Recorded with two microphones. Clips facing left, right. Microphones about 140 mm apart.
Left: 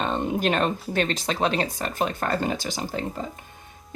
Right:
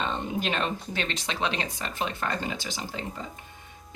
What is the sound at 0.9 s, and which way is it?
Speech, 40° left (ahead or behind).